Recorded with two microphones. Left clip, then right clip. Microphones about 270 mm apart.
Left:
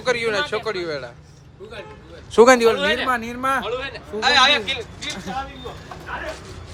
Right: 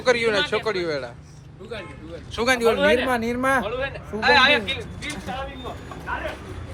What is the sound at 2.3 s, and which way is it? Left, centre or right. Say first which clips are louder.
Speech: left 9 dB; left.